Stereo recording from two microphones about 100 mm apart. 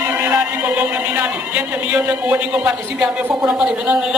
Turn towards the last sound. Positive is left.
turn(degrees=-10)  # may be behind; listen again after turning